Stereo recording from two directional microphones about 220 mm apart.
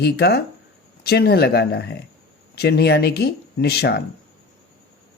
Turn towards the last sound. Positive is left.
turn(degrees=50)  # may be behind; listen again after turning